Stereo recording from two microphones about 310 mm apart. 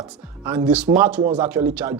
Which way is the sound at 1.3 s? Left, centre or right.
Centre.